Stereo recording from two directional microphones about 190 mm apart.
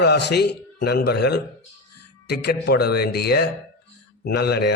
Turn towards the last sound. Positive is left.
turn(degrees=55)  # may be behind; listen again after turning